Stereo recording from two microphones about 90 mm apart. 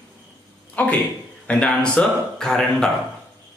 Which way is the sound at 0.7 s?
15° left (ahead or behind).